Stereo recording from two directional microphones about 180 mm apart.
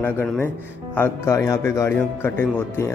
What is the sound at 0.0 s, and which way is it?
Speech, 10° left (ahead or behind).